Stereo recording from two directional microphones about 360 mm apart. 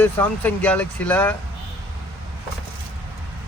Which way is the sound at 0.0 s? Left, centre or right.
Centre.